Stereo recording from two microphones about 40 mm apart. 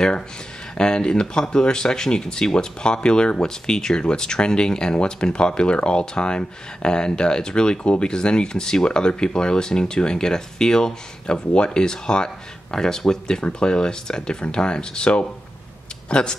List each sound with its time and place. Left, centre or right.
0.7 s speech: left